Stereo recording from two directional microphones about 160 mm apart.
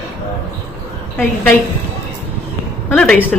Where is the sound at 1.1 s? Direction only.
10° left (ahead or behind).